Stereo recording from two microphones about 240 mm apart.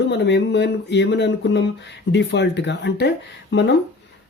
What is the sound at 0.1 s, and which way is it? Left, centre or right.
Speech, left.